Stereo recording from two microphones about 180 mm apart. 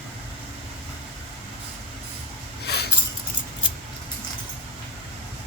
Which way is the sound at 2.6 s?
65° left (ahead or behind).